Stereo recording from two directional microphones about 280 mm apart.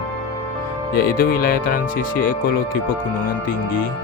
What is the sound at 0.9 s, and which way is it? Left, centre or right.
Speech, left.